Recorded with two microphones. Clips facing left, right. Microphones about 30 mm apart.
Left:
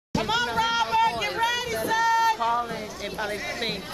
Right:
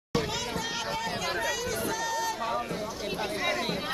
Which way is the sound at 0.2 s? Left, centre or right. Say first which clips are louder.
Left 8 dB; left.